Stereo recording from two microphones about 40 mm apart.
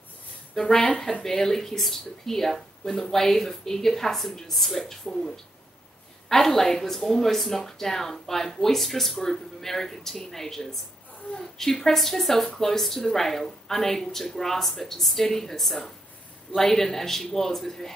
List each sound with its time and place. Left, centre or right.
0.6 s a woman's voice: centre